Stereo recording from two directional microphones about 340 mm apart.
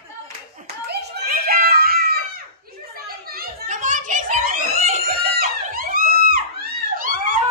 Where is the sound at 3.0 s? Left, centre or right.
Right.